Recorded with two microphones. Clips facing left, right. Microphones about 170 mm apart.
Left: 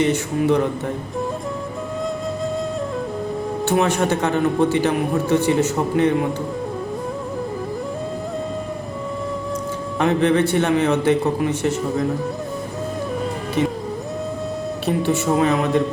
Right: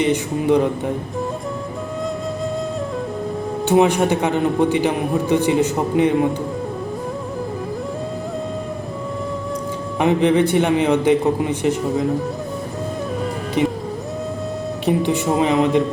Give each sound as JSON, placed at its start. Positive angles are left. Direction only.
{"t": 0.0, "sound": "a man's voice", "side_deg": -15}
{"t": 3.7, "sound": "a man's voice", "side_deg": -15}
{"t": 10.0, "sound": "a man's voice", "side_deg": -15}
{"t": 13.6, "sound": "music", "side_deg": -15}
{"t": 14.8, "sound": "a man's voice", "side_deg": -15}